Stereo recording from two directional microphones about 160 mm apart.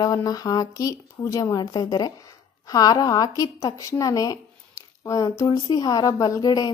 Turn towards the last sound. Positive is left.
turn(degrees=25)  # may be behind; listen again after turning